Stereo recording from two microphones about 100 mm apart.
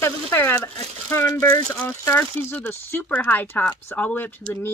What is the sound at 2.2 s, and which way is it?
Speech, 20° left (ahead or behind).